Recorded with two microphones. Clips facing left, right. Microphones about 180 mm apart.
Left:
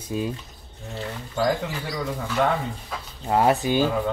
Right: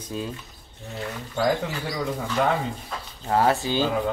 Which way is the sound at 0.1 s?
10° left (ahead or behind).